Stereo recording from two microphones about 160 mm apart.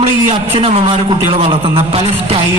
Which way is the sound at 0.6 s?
35° right (ahead or behind).